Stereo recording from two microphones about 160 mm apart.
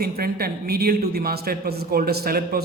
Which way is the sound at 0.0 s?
70° right (ahead or behind).